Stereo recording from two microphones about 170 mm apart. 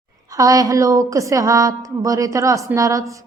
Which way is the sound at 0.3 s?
20° right (ahead or behind).